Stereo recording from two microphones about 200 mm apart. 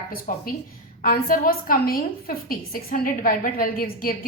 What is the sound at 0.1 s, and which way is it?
A woman's voice, 45° left (ahead or behind).